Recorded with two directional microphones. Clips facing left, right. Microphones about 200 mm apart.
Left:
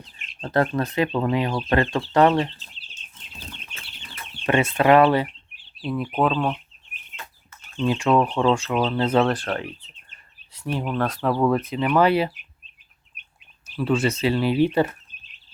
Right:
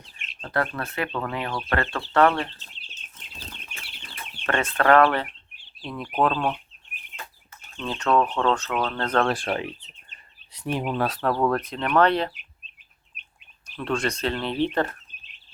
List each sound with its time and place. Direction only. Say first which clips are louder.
0.4 s speech: left 6 dB; 25° left (ahead or behind)
4.4 s speech: left 3 dB; 10° left (ahead or behind)
7.8 s speech: left 3 dB; 10° left (ahead or behind)
9.3 s speech: even; 10° right (ahead or behind)
10.1 s bird: right 1 dB; 15° right (ahead or behind)
11.0 s speech: left 3 dB; centre (ahead or behind)
13.7 s speech: left 5 dB; 5° left (ahead or behind)